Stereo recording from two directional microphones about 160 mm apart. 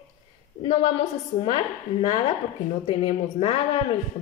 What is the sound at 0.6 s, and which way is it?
A woman's voice, 35° left (ahead or behind).